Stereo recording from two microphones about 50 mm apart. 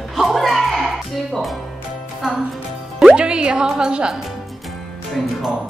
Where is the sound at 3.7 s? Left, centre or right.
Centre.